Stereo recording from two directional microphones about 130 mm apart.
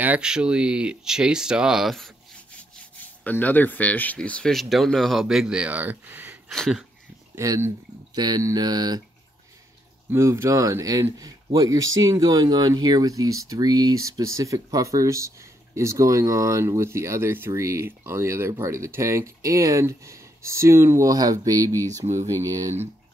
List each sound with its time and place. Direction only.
0.0 s speech: 10° right (ahead or behind)
3.3 s speech: 15° left (ahead or behind); by 6.3 s 15° right (ahead or behind)
6.5 s speech: 5° left (ahead or behind)
7.3 s speech: 25° right (ahead or behind)
10.1 s speech: 20° right (ahead or behind)